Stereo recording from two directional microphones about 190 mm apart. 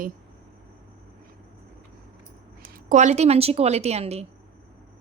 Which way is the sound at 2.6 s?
45° right (ahead or behind).